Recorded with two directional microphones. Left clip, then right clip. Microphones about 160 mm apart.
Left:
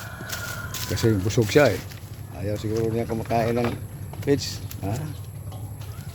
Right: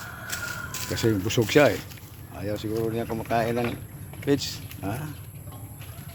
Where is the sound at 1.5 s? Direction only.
5° left (ahead or behind).